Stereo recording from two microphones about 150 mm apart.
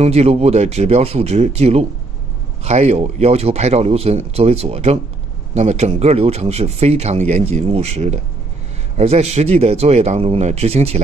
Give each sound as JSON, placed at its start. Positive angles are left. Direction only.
{"t": 0.0, "sound": "speech", "side_deg": -45}